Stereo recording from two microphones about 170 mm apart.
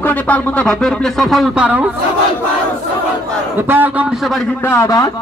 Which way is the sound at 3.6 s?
10° right (ahead or behind).